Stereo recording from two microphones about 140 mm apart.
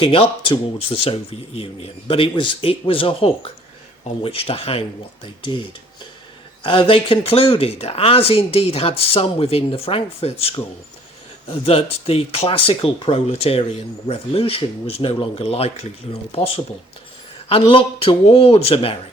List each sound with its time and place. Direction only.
0.0 s speech: 40° left (ahead or behind)
11.6 s speech: 45° left (ahead or behind)
17.5 s speech: 40° left (ahead or behind)